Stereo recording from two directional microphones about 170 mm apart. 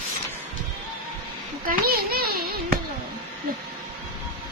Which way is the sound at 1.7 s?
60° right (ahead or behind).